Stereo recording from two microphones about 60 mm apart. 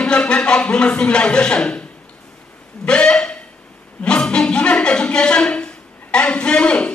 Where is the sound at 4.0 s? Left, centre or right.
Centre.